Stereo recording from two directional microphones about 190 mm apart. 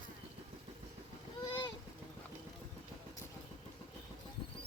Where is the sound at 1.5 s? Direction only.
20° left (ahead or behind).